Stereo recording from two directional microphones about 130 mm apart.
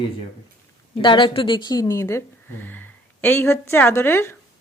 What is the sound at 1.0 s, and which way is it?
A woman's voice, 35° left (ahead or behind).